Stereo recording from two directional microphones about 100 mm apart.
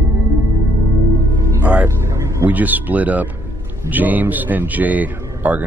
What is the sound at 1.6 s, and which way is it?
Music, 15° right (ahead or behind).